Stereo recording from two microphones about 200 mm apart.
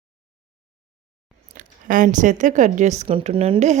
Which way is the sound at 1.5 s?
40° right (ahead or behind).